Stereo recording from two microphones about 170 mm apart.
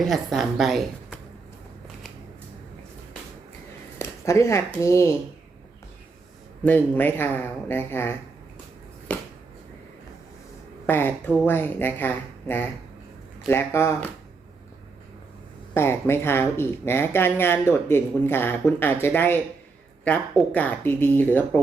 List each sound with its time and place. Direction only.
0.0 s a woman's voice: centre (ahead or behind)
3.9 s speech: 15° left (ahead or behind)
6.7 s speech: 10° left (ahead or behind)
9.1 s a sound: 10° left (ahead or behind)
10.8 s speech: 10° left (ahead or behind)
15.7 s speech: 15° left (ahead or behind)